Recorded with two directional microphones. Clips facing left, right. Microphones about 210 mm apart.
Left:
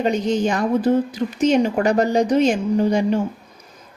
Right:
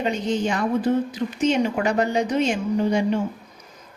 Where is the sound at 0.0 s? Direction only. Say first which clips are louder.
Left 4 dB; 40° left (ahead or behind).